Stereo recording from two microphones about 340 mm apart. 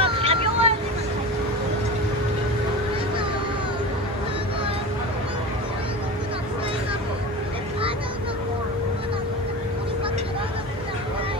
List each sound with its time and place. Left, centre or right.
0.0 s vehicle: centre